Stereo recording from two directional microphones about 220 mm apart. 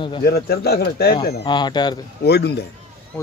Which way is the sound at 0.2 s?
45° left (ahead or behind).